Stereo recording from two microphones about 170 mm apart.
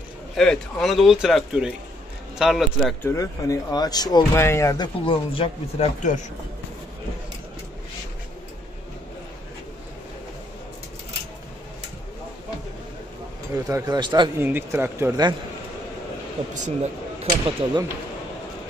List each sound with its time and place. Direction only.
0.4 s speech: centre (ahead or behind)
3.0 s speech: 20° left (ahead or behind)
6.1 s speech: 50° left (ahead or behind)
13.7 s speech: 20° right (ahead or behind)
14.4 s speech: 15° right (ahead or behind)
16.6 s speech: 40° right (ahead or behind)